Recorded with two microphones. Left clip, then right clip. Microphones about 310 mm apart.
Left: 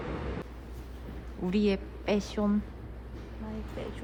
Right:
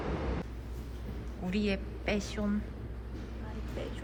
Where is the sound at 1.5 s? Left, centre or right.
Centre.